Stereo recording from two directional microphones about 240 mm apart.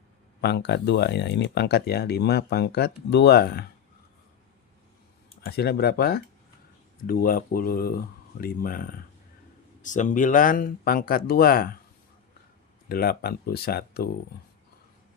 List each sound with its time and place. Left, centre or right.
0.4 s speech: left
5.5 s speech: left
12.9 s speech: left